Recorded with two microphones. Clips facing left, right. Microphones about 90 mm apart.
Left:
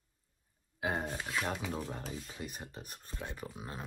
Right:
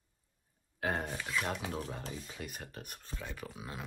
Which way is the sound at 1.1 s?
20° left (ahead or behind).